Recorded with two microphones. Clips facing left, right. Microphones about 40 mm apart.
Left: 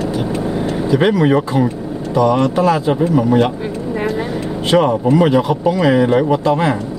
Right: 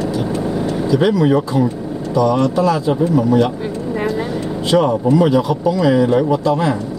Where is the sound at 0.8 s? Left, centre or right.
Left.